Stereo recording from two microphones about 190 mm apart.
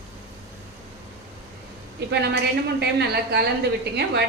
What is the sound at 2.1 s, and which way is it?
A woman's voice, 60° right (ahead or behind).